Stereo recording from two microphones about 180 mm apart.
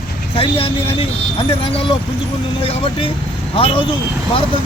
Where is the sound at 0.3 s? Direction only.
30° left (ahead or behind).